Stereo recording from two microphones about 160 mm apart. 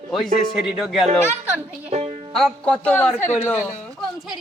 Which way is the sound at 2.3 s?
5° left (ahead or behind).